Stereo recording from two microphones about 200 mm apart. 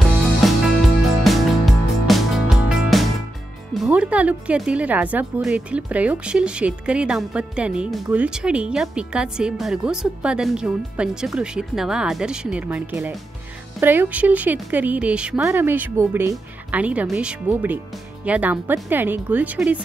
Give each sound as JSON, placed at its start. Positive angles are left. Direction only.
{"t": 0.2, "sound": "music", "side_deg": 0}
{"t": 3.7, "sound": "speech", "side_deg": -5}